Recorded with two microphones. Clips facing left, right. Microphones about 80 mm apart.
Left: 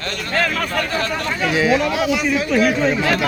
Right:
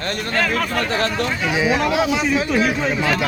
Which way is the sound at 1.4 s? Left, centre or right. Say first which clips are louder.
Left 3 dB; centre.